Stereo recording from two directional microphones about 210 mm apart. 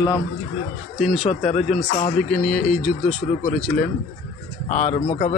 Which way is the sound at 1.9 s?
35° left (ahead or behind).